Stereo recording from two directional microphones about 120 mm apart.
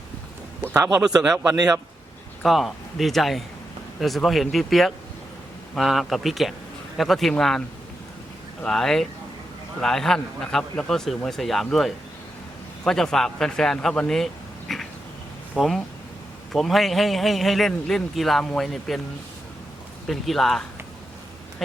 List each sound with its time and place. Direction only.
0.6 s a man's voice: 25° right (ahead or behind)
1.0 s a man's voice: 5° right (ahead or behind)
1.5 s a man's voice: 30° right (ahead or behind)
2.4 s a man's voice: centre (ahead or behind)
8.6 s a man's voice: 5° left (ahead or behind)
14.7 s cat: centre (ahead or behind)
15.5 s a man's voice: centre (ahead or behind)
20.1 s a man's voice: centre (ahead or behind)